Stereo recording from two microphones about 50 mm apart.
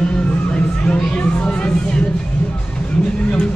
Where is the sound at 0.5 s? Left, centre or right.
Left.